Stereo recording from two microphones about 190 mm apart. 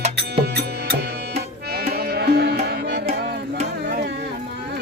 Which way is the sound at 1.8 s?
55° right (ahead or behind).